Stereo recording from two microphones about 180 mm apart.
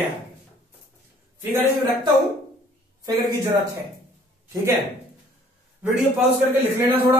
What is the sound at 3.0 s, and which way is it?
Speech, 20° right (ahead or behind).